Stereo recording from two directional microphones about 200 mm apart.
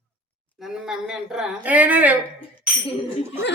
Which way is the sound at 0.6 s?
Centre (ahead or behind).